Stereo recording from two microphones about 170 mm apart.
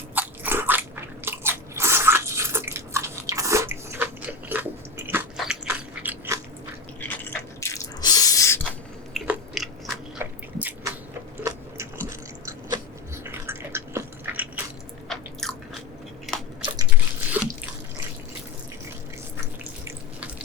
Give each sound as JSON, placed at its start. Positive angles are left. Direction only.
{"t": 0.1, "sound": "biting", "side_deg": -10}
{"t": 7.0, "sound": "drip", "side_deg": 15}
{"t": 9.1, "sound": "biting", "side_deg": 0}
{"t": 10.6, "sound": "a sound", "side_deg": -10}
{"t": 11.4, "sound": "biting", "side_deg": -15}
{"t": 13.2, "sound": "a sound", "side_deg": -15}
{"t": 15.1, "sound": "biting", "side_deg": 0}
{"t": 17.4, "sound": "bathtub", "side_deg": -10}